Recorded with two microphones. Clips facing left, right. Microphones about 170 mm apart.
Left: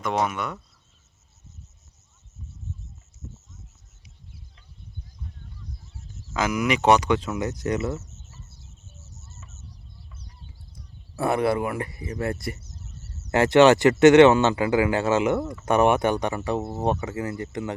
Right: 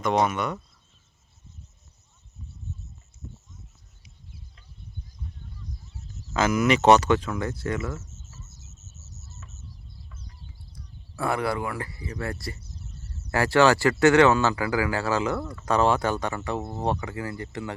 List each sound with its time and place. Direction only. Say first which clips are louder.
0.0 s speech: right 2 dB; 5° left (ahead or behind)
6.3 s speech: right 2 dB; 15° left (ahead or behind)
8.4 s cricket: even; 45° right (ahead or behind)
11.2 s speech: left 4 dB; 20° left (ahead or behind)